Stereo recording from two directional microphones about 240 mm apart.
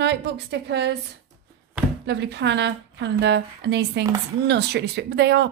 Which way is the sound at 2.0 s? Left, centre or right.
Right.